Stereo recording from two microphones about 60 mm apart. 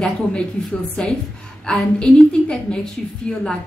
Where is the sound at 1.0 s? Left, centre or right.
Centre.